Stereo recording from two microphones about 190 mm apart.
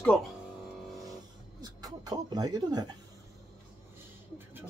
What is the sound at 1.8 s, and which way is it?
Speech, 20° right (ahead or behind).